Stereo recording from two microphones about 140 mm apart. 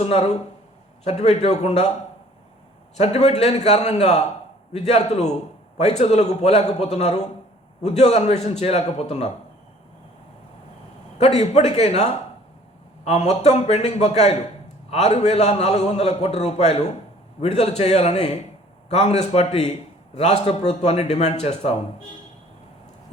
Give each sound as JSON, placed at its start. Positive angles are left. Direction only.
{"t": 0.0, "sound": "a man's voice", "side_deg": 50}
{"t": 3.0, "sound": "a man's voice", "side_deg": 50}
{"t": 11.2, "sound": "a man's voice", "side_deg": 50}